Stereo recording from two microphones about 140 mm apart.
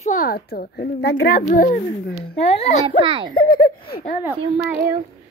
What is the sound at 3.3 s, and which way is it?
Speech, 90° left.